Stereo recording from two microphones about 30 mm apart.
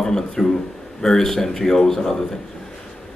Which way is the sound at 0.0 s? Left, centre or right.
Centre.